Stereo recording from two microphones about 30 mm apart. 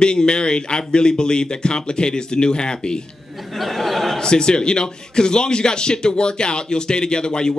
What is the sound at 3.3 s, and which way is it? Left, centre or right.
Speech, centre.